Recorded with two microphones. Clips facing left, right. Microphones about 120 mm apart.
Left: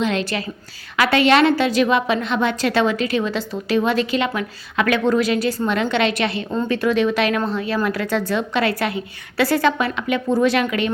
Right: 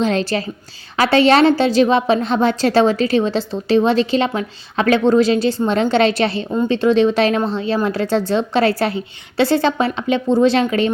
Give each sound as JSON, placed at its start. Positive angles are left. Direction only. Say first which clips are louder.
{"t": 0.0, "sound": "a woman's voice", "louder": "right 4 dB", "side_deg": -35}